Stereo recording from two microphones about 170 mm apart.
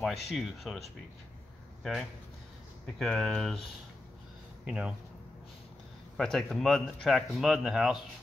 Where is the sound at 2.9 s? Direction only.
5° left (ahead or behind).